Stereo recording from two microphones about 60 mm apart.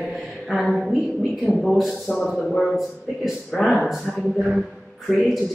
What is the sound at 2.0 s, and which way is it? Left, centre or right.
Speech, centre.